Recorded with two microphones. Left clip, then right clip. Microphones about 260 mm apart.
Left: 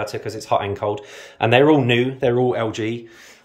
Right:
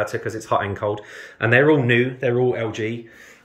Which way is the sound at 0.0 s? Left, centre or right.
Centre.